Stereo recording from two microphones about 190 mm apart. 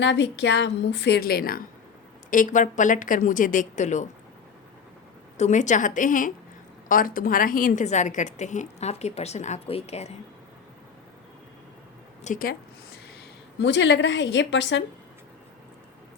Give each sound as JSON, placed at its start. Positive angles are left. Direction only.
{"t": 0.0, "sound": "a woman's voice", "side_deg": 65}
{"t": 5.4, "sound": "a woman's voice", "side_deg": 40}
{"t": 12.2, "sound": "speech", "side_deg": 45}
{"t": 13.6, "sound": "a woman's voice", "side_deg": 65}